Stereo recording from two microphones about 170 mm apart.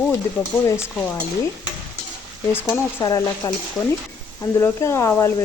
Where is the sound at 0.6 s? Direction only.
15° left (ahead or behind).